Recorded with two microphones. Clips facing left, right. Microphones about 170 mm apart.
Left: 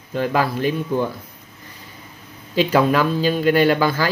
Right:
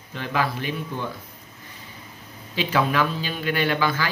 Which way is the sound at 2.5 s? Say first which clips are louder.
Left 7 dB; 45° left (ahead or behind).